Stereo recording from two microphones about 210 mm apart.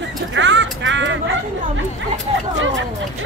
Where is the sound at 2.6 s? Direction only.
60° right (ahead or behind).